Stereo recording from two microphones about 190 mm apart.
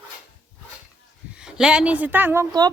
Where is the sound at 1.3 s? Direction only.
5° right (ahead or behind).